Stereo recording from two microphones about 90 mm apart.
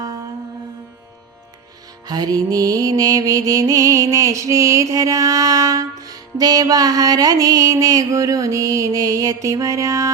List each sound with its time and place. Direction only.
2.0 s music: 45° right (ahead or behind)